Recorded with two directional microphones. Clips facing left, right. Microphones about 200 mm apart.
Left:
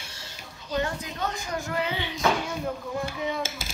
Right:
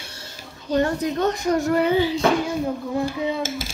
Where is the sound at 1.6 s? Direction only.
40° right (ahead or behind).